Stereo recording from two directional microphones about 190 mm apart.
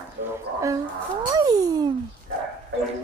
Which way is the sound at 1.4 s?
20° right (ahead or behind).